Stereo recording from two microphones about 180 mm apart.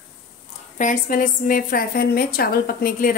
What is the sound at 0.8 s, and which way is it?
A woman's voice, 45° left (ahead or behind).